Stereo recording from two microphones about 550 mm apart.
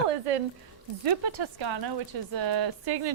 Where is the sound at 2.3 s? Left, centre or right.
Right.